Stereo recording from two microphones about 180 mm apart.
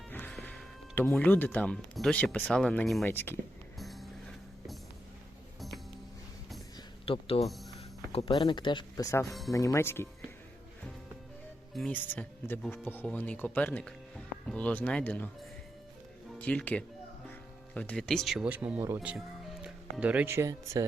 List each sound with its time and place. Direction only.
0.1 s speech: 10° left (ahead or behind)
3.8 s music: centre (ahead or behind)
5.5 s music: centre (ahead or behind)
7.0 s speech: 30° left (ahead or behind)
7.4 s speech: centre (ahead or behind)
8.1 s speech: 25° left (ahead or behind)
11.7 s speech: 5° left (ahead or behind)
16.4 s speech: 5° left (ahead or behind); by 20.8 s 15° right (ahead or behind)